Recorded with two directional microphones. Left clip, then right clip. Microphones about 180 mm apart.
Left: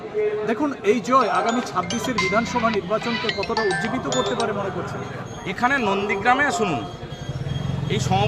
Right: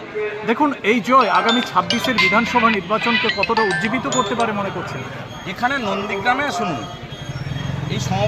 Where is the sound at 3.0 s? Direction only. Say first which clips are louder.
Right 7 dB; centre (ahead or behind).